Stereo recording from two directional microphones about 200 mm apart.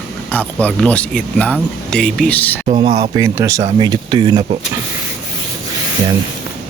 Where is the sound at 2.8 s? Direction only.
20° right (ahead or behind).